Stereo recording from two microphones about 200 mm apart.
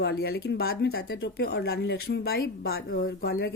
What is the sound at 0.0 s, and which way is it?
Speech, 50° left (ahead or behind).